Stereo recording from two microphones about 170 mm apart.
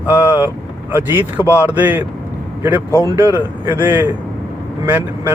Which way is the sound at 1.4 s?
15° left (ahead or behind).